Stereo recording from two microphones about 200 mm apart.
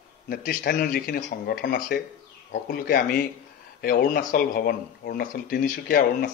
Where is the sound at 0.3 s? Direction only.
45° left (ahead or behind).